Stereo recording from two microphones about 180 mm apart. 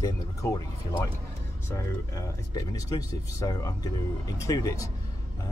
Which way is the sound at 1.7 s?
20° left (ahead or behind).